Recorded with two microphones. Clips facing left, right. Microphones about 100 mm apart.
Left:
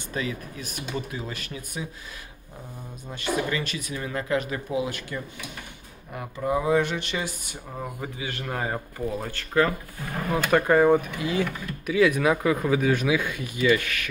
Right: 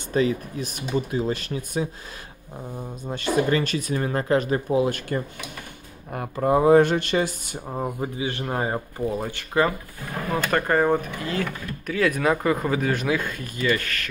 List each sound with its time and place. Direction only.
0.1 s speech: 30° right (ahead or behind)
3.1 s speech: 40° right (ahead or behind); by 9.3 s 20° right (ahead or behind)
9.5 s speech: 10° right (ahead or behind)
10.3 s speech: 5° left (ahead or behind)